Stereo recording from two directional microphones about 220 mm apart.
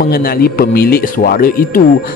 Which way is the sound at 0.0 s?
45° left (ahead or behind).